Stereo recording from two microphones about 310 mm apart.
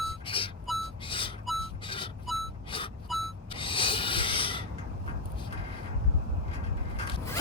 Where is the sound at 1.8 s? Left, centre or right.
Centre.